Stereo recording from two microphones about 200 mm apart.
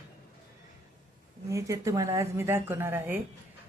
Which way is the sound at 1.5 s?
15° right (ahead or behind).